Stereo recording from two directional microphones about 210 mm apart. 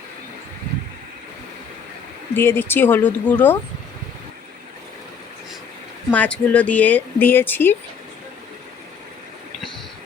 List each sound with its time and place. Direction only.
2.3 s speech: 10° left (ahead or behind)
6.1 s speech: 5° left (ahead or behind)